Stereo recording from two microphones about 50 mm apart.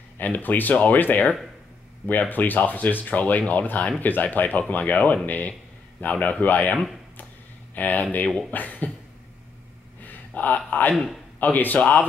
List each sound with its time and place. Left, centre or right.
0.2 s a man's voice: left
10.3 s a man's voice: left